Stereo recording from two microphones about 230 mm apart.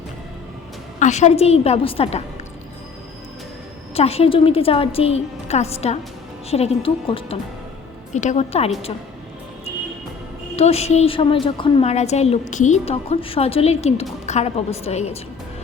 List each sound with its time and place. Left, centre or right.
0.9 s a woman's voice: left
3.9 s a woman's voice: left
10.6 s a woman's voice: left